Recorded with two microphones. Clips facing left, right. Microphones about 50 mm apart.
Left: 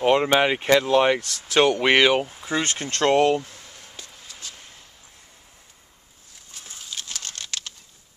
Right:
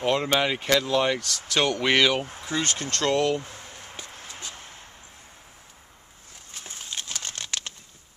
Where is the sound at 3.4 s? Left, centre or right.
Right.